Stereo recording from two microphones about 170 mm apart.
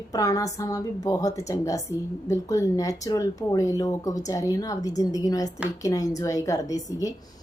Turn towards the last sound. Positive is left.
turn(degrees=20)  # may be behind; listen again after turning